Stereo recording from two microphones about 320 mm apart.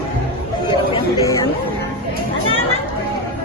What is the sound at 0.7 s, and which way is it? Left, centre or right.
Speech, centre.